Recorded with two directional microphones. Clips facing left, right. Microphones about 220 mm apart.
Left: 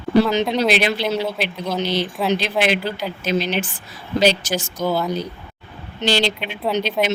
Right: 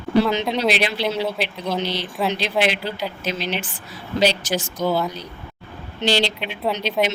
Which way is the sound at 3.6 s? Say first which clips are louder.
Left 6 dB; 45° left (ahead or behind).